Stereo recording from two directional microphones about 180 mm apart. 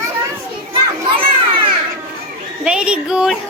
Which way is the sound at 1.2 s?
30° right (ahead or behind).